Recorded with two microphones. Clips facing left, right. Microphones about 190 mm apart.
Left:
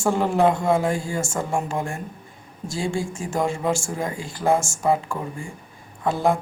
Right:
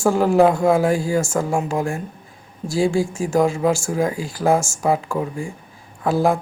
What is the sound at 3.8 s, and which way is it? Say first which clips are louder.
Speech: right 7 dB; 90° right.